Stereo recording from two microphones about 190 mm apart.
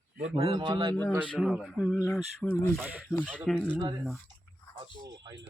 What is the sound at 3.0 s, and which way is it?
Speech, 5° left (ahead or behind).